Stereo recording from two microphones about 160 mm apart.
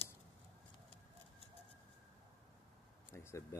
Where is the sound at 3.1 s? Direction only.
15° left (ahead or behind).